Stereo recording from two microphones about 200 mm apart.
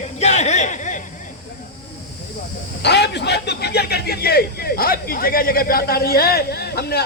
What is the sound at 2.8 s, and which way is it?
Speech, 55° left (ahead or behind).